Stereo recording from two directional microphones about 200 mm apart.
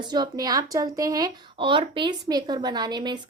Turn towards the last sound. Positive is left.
turn(degrees=-20)  # may be behind; listen again after turning